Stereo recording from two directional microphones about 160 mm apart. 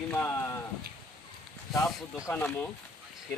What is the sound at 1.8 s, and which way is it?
Speech, centre (ahead or behind).